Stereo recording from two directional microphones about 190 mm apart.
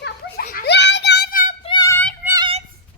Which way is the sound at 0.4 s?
55° left (ahead or behind).